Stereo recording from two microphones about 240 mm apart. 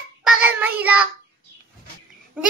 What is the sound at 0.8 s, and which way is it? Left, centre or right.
Speech, centre.